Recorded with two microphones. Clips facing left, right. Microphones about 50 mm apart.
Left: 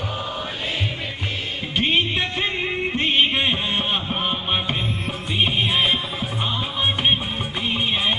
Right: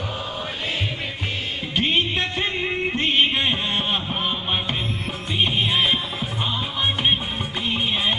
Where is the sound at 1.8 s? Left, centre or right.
Centre.